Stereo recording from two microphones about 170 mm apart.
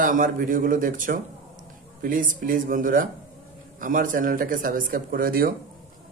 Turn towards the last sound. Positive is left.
turn(degrees=-60)  # may be behind; listen again after turning